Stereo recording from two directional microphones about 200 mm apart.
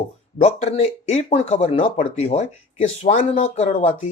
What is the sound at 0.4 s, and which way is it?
Speech, 35° left (ahead or behind).